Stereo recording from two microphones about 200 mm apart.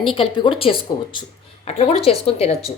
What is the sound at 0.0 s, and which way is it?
A woman's voice, 25° left (ahead or behind).